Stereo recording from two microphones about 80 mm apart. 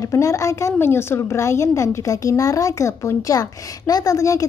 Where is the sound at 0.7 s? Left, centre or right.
Left.